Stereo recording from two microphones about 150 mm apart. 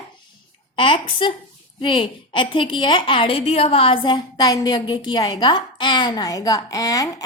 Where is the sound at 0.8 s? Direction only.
35° left (ahead or behind).